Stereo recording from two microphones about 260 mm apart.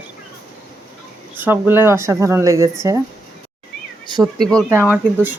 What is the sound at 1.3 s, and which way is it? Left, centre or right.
Speech, centre.